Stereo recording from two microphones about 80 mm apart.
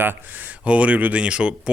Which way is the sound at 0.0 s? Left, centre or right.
Right.